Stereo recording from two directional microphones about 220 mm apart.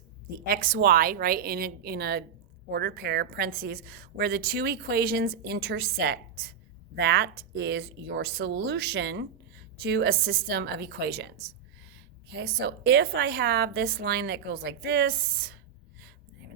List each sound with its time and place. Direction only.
0.4 s a woman's voice: 40° right (ahead or behind)